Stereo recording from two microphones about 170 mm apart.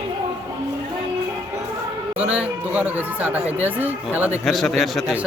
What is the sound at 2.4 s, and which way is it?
A man's voice, 10° right (ahead or behind).